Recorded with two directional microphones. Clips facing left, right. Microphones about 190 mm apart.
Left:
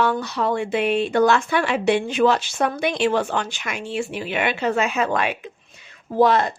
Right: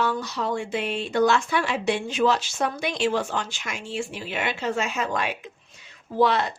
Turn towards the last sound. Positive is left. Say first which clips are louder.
# left 4 dB
turn(degrees=45)  # may be behind; listen again after turning